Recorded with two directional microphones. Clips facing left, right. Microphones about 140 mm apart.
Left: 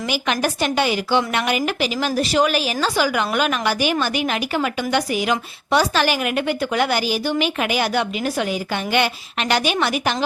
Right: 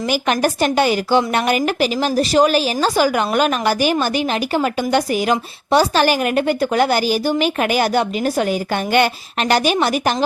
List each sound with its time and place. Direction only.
0.0 s a woman's voice: 45° right (ahead or behind)